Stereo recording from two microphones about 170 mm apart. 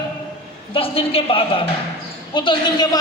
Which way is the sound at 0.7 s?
35° left (ahead or behind).